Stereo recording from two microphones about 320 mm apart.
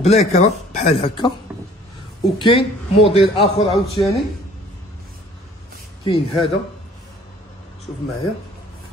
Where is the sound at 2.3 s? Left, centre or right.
Centre.